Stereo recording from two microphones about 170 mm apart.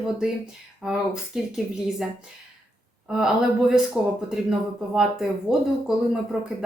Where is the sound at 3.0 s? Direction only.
5° right (ahead or behind).